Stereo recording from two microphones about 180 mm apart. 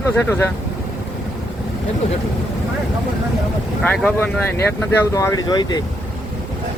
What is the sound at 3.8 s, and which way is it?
Speech, 10° left (ahead or behind).